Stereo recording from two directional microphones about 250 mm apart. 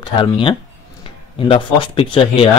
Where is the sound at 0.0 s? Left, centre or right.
Centre.